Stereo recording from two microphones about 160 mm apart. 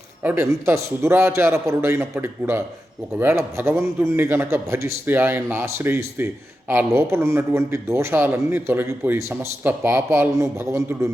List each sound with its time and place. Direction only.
0.2 s a man's voice: 15° right (ahead or behind)